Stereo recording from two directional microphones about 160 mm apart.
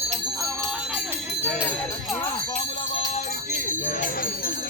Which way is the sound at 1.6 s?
10° left (ahead or behind).